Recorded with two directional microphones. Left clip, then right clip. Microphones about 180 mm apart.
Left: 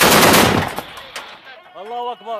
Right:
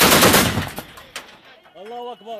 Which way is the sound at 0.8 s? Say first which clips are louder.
Left 5 dB; centre (ahead or behind).